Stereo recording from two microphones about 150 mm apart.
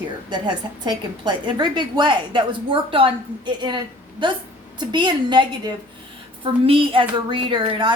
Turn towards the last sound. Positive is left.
turn(degrees=-35)  # may be behind; listen again after turning